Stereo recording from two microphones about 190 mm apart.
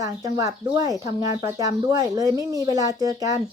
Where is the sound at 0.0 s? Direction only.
20° right (ahead or behind).